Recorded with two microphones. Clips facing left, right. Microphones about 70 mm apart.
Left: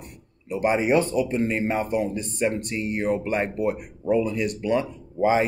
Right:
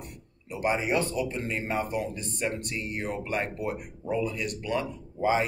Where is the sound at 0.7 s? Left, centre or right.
Left.